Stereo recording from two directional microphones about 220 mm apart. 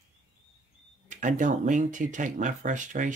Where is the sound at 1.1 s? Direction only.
35° right (ahead or behind).